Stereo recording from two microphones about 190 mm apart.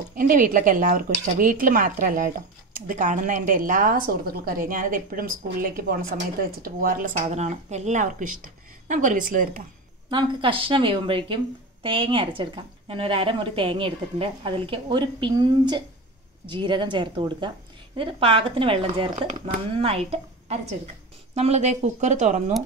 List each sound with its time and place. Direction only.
0.1 s a woman's voice: 50° right (ahead or behind)
10.0 s a woman's voice: 25° right (ahead or behind)